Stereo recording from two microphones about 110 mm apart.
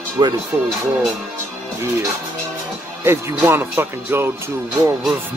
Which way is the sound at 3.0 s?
25° right (ahead or behind).